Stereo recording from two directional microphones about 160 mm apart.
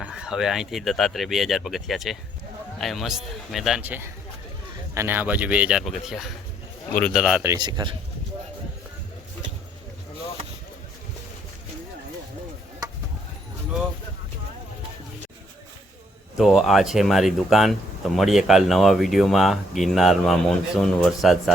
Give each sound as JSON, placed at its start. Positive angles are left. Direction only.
{"t": 0.0, "sound": "speech", "side_deg": -5}
{"t": 7.4, "sound": "a man's voice", "side_deg": -25}
{"t": 16.4, "sound": "speech", "side_deg": 0}